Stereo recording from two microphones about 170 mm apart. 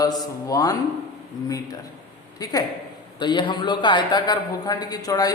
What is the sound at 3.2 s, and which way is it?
A woman's voice, 25° left (ahead or behind).